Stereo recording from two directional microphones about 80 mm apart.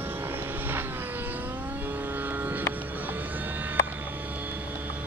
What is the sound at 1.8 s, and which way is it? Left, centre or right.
Vehicle, right.